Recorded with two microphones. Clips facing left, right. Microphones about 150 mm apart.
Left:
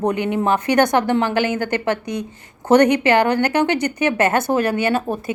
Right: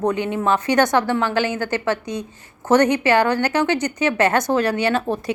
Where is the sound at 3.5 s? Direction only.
55° left (ahead or behind).